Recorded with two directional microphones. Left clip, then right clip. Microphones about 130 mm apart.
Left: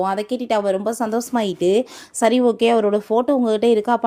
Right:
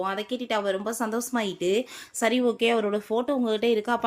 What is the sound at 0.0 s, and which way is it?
Speech, 45° left (ahead or behind).